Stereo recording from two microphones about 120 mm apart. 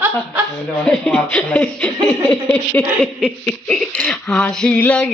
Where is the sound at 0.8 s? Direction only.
5° left (ahead or behind).